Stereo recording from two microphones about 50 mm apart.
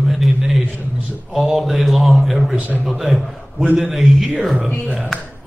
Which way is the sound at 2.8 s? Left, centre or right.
Centre.